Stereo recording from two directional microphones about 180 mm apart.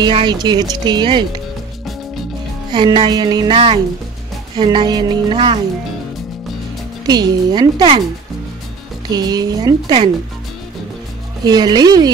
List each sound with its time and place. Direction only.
0.0 s speech: 25° right (ahead or behind)
2.7 s speech: 25° right (ahead or behind)
7.1 s speech: 25° right (ahead or behind)
9.1 s speech: 20° right (ahead or behind)
11.4 s speech: 20° right (ahead or behind)